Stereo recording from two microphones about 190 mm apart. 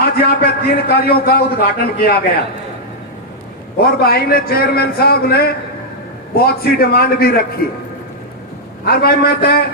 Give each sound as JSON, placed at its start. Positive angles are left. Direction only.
{"t": 0.2, "sound": "a man's voice", "side_deg": 55}
{"t": 3.8, "sound": "a man's voice", "side_deg": 55}
{"t": 8.8, "sound": "a man's voice", "side_deg": 55}